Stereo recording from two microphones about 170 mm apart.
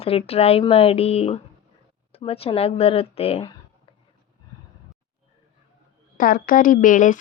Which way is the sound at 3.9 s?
30° left (ahead or behind).